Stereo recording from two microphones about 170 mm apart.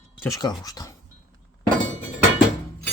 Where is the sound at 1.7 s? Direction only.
45° right (ahead or behind).